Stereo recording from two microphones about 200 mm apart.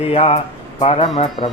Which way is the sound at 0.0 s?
30° left (ahead or behind).